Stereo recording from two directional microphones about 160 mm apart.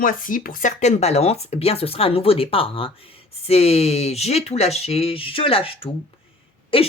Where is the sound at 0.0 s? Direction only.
60° left (ahead or behind).